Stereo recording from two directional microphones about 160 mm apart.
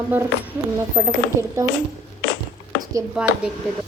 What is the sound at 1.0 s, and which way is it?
Speech, 25° right (ahead or behind).